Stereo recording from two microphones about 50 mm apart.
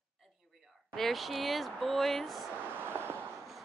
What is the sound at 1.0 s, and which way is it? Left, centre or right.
A woman's voice, centre.